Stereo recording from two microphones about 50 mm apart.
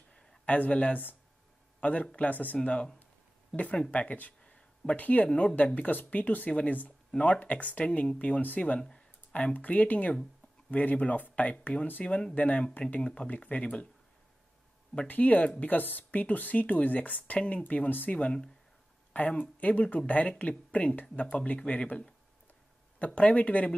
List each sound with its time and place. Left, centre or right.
0.5 s a man's voice: left
2.6 s speech: left
3.9 s a sound: left
4.9 s speech: left
12.0 s speech: centre
13.3 s speech: left
15.0 s speech: left
18.1 s speech: left